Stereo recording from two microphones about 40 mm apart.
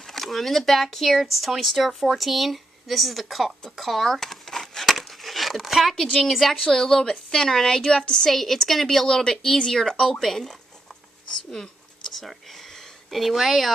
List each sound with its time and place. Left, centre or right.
0.0 s speech: centre
3.7 s a sound: centre
4.9 s a sound: centre
6.4 s a woman's voice: centre
8.3 s speech: centre
9.0 s a woman's voice: centre
12.1 s speech: centre